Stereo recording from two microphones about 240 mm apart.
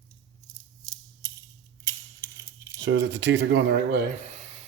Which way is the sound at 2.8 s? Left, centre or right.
Right.